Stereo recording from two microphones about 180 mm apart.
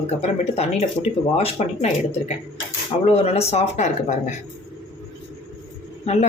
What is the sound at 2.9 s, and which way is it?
Speech, 35° left (ahead or behind).